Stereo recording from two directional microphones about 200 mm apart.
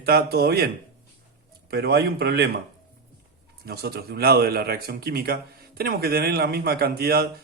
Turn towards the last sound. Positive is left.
turn(degrees=-50)  # may be behind; listen again after turning